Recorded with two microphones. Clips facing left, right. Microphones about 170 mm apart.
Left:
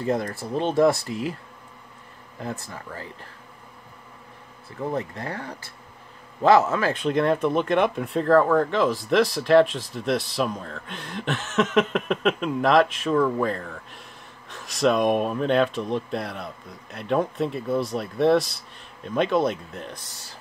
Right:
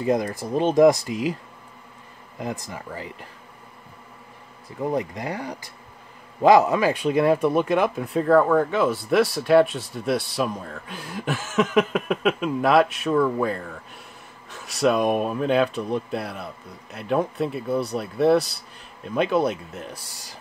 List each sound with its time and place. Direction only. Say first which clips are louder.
0.0 s speech: right 3 dB; 15° right (ahead or behind)
2.3 s speech: right 2 dB; 15° right (ahead or behind)
4.6 s speech: right 3 dB; 15° right (ahead or behind)